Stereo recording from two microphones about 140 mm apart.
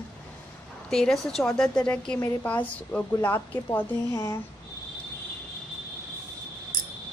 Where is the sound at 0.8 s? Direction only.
5° left (ahead or behind).